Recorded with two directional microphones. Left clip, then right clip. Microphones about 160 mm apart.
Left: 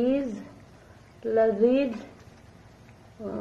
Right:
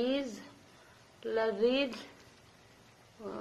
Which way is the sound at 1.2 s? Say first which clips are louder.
Left 9 dB; 20° right (ahead or behind).